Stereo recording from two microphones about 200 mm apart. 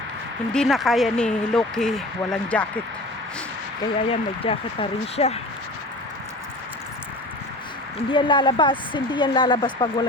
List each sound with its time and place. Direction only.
0.5 s speech: centre (ahead or behind)
4.1 s speech: 30° left (ahead or behind)
8.1 s speech: 25° left (ahead or behind)